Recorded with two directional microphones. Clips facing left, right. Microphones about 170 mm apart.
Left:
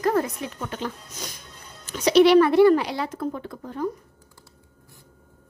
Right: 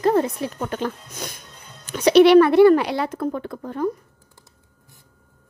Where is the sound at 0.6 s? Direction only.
50° right (ahead or behind).